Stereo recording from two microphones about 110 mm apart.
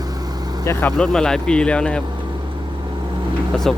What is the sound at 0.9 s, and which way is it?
Speech, 5° left (ahead or behind).